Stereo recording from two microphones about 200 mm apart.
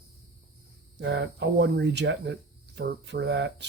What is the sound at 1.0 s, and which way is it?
Speech, 60° right (ahead or behind).